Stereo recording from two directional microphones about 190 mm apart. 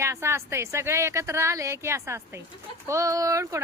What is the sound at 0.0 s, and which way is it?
Speech, 15° right (ahead or behind).